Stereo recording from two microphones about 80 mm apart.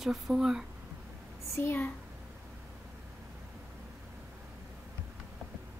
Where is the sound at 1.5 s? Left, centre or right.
Left.